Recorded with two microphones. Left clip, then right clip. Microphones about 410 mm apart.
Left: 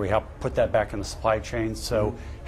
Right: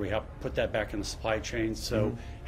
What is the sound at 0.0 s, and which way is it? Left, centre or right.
Speech, left.